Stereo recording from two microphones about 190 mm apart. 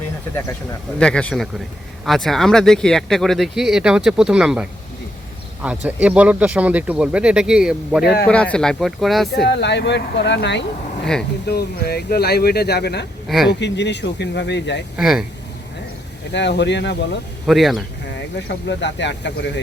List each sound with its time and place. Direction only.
0.9 s speech: 5° left (ahead or behind)
5.6 s speech: 5° right (ahead or behind)
8.2 s speech: 5° left (ahead or behind)
9.4 s speech: 65° left (ahead or behind)
11.0 s speech: 5° left (ahead or behind)
11.4 s speech: 55° left (ahead or behind)
13.2 s speech: centre (ahead or behind)
13.5 s speech: 65° left (ahead or behind)
14.9 s speech: centre (ahead or behind)
16.3 s speech: 65° left (ahead or behind)
17.4 s speech: centre (ahead or behind)
18.1 s speech: 65° left (ahead or behind)